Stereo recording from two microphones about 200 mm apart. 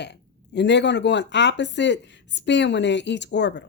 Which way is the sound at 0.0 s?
60° left (ahead or behind).